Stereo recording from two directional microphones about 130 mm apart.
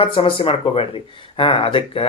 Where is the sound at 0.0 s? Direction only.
45° left (ahead or behind).